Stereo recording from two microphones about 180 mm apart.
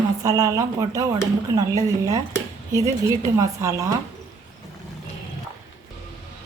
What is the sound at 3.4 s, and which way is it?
Speech, 20° right (ahead or behind).